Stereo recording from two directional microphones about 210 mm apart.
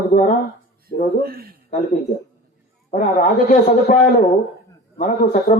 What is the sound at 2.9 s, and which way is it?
A man's voice, 35° left (ahead or behind).